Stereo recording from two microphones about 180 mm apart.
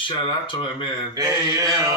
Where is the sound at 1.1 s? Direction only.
20° right (ahead or behind).